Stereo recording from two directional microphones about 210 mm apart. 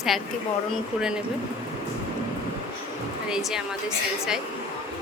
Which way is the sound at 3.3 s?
Centre (ahead or behind).